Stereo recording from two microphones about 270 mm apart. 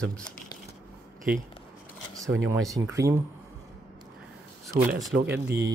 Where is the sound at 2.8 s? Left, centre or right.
Centre.